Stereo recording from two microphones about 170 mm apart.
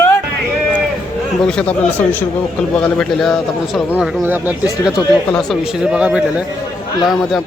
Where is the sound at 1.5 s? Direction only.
5° left (ahead or behind).